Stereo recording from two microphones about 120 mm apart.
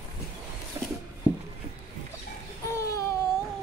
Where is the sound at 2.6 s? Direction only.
25° left (ahead or behind).